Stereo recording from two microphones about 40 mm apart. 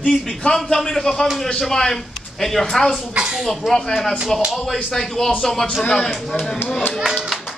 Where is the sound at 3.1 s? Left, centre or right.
Centre.